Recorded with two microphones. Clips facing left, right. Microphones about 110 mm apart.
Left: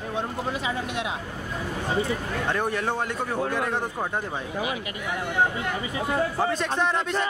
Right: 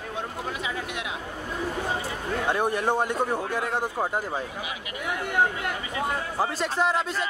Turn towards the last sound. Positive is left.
turn(degrees=-5)  # may be behind; listen again after turning